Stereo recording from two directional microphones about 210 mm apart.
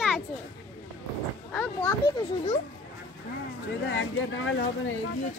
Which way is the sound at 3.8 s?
60° left (ahead or behind).